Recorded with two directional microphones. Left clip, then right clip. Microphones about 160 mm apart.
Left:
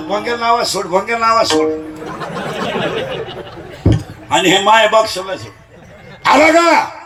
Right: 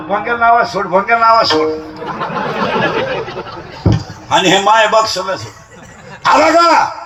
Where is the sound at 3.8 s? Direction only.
60° left (ahead or behind).